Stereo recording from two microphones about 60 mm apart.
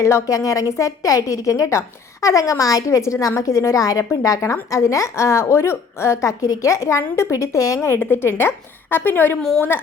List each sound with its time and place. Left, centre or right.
0.0 s a woman's voice: left